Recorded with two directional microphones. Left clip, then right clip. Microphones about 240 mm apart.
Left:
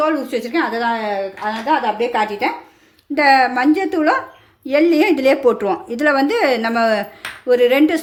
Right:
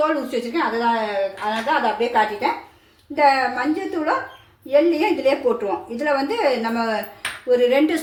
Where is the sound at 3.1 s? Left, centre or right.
Left.